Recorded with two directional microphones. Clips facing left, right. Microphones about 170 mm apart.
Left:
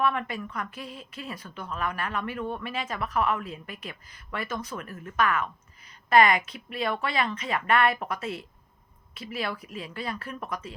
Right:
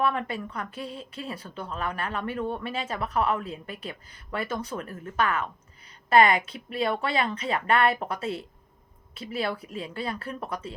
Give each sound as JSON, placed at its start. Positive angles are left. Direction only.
{"t": 0.0, "sound": "speech", "side_deg": -30}